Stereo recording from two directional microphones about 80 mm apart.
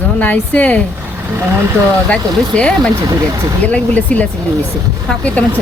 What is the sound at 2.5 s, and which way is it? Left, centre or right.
Speech, centre.